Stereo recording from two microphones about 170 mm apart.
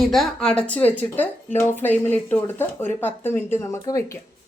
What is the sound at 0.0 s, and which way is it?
Speech, centre (ahead or behind).